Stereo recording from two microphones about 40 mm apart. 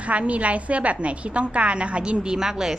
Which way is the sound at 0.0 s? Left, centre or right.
Right.